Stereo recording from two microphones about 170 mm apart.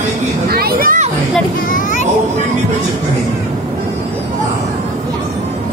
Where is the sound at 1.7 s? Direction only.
50° left (ahead or behind).